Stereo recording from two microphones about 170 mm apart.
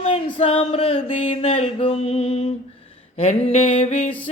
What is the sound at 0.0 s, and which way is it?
Music, 35° left (ahead or behind).